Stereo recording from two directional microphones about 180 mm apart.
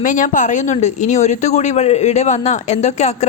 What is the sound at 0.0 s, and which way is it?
A woman's voice, 45° left (ahead or behind).